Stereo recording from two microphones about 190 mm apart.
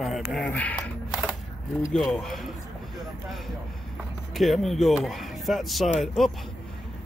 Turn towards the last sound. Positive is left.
turn(degrees=0)  # may be behind; listen again after turning